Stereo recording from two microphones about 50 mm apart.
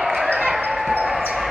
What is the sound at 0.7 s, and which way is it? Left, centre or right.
Basketball bounce, centre.